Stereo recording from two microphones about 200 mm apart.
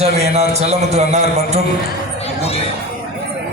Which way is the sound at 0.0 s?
35° right (ahead or behind).